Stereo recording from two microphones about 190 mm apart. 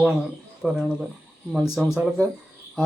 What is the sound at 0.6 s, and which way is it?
Speech, 5° right (ahead or behind).